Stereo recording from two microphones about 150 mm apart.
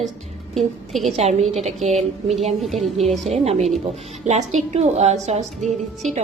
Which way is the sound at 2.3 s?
Centre (ahead or behind).